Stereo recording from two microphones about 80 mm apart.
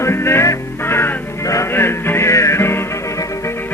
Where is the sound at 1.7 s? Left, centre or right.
Left.